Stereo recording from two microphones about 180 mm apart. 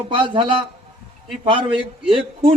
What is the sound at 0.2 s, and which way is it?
Speech, 25° right (ahead or behind).